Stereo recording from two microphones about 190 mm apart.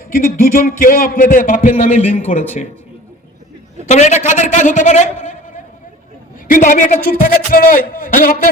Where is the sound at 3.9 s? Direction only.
35° left (ahead or behind).